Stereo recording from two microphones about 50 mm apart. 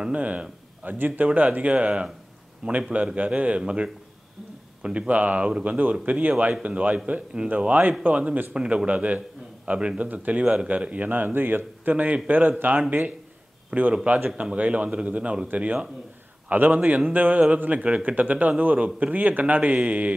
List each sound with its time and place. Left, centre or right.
0.1 s a man's voice: right
7.4 s a man's voice: right
11.1 s speech: right
13.7 s a man's voice: right